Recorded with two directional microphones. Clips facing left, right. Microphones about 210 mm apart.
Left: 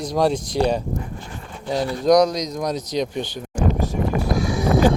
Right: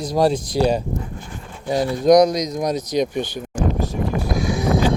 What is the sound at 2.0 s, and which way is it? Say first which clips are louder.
Speech: right 3 dB; 15° right (ahead or behind).